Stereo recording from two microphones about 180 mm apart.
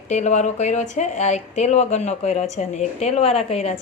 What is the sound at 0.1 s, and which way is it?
Speech, 40° left (ahead or behind).